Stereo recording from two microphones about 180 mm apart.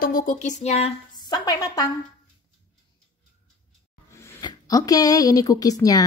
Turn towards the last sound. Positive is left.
turn(degrees=20)  # may be behind; listen again after turning